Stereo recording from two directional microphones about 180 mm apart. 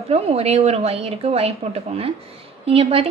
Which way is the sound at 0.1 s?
35° right (ahead or behind).